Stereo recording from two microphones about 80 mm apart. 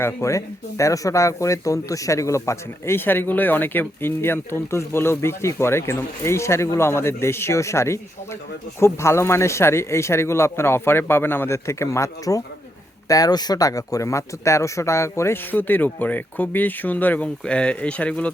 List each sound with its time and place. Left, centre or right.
0.0 s speech: left
15.5 s speech: left